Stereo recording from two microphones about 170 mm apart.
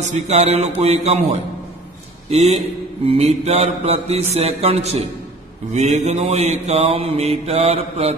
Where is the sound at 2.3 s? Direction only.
40° right (ahead or behind).